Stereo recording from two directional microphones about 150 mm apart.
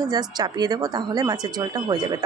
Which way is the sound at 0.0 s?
25° right (ahead or behind).